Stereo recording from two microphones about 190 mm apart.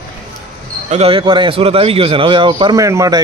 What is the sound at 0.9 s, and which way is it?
A man's voice, 30° right (ahead or behind).